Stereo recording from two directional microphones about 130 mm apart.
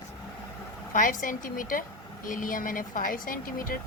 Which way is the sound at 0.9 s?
90° left.